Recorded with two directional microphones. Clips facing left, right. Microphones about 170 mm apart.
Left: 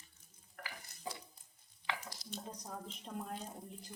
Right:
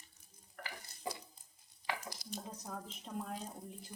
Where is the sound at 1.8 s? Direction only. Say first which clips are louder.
Right 1 dB; 40° right (ahead or behind).